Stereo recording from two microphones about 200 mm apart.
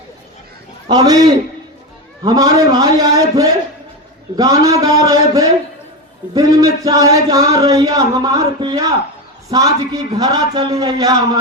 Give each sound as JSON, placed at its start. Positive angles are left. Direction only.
{"t": 0.9, "sound": "a man's voice", "side_deg": -20}